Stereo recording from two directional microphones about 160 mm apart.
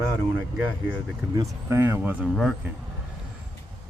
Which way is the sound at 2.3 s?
Centre (ahead or behind).